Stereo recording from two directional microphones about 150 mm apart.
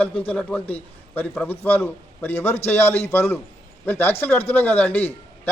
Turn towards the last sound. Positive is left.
turn(degrees=10)  # may be behind; listen again after turning